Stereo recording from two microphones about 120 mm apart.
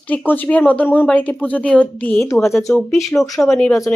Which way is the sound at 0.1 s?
15° left (ahead or behind).